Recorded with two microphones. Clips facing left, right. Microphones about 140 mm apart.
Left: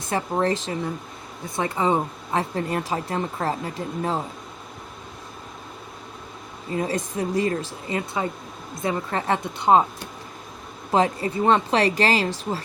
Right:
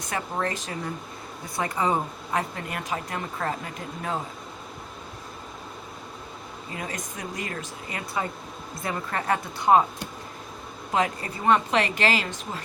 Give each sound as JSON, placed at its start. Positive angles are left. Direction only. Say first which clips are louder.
{"t": 0.1, "sound": "a woman's voice", "louder": "left 6 dB", "side_deg": 30}
{"t": 6.7, "sound": "a woman's voice", "louder": "left 10 dB", "side_deg": 30}
{"t": 10.9, "sound": "speech", "louder": "left 5 dB", "side_deg": 30}